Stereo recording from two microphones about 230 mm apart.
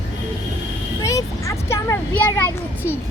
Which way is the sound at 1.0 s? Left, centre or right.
Centre.